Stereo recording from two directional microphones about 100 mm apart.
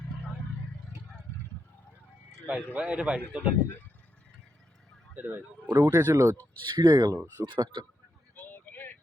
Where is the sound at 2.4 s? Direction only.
10° right (ahead or behind).